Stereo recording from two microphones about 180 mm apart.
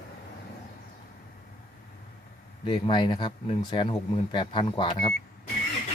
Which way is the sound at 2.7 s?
25° left (ahead or behind).